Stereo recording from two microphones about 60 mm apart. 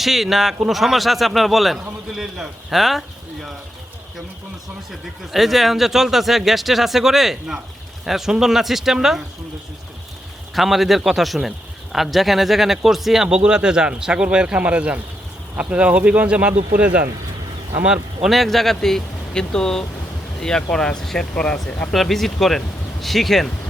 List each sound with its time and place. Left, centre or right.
0.0 s a man's voice: centre
4.9 s a man's voice: centre
10.5 s a man's voice: centre
13.2 s speech: centre
18.3 s speech: centre
21.9 s a man's voice: centre